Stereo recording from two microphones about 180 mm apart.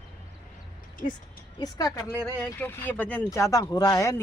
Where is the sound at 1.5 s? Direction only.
20° left (ahead or behind).